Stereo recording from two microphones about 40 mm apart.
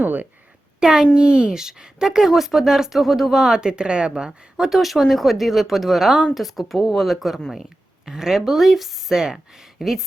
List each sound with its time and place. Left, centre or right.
0.0 s a woman's voice: right
0.8 s speech: centre
3.5 s speech: right
4.1 s speech: centre